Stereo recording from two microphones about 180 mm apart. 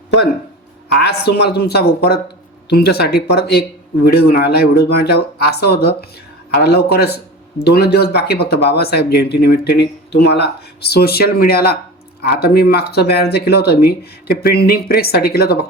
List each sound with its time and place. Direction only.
0.9 s speech: 65° left (ahead or behind)